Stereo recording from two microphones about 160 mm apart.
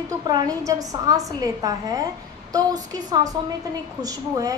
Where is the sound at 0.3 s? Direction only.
25° right (ahead or behind).